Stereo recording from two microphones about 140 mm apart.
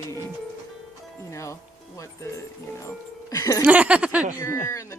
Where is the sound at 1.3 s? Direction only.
20° left (ahead or behind).